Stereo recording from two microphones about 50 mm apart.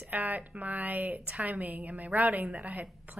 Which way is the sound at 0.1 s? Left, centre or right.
Right.